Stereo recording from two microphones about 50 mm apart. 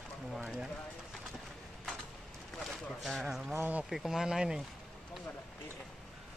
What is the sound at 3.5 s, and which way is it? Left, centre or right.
Speech, right.